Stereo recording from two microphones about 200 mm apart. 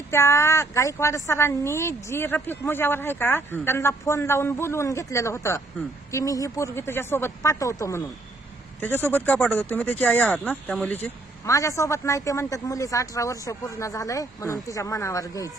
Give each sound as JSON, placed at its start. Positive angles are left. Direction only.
{"t": 0.1, "sound": "speech", "side_deg": 15}